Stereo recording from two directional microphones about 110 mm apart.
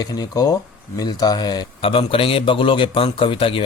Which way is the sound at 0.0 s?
35° left (ahead or behind).